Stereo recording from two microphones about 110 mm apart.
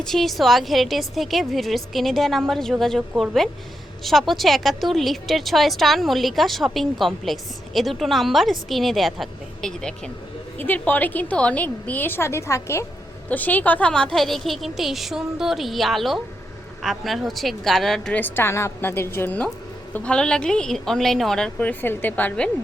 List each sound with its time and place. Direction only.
0.0 s a woman's voice: 5° left (ahead or behind)
10.6 s a woman's voice: 15° left (ahead or behind)
13.2 s a woman's voice: 15° left (ahead or behind)